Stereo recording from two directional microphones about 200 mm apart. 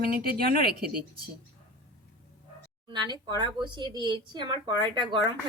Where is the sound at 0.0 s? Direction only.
50° right (ahead or behind).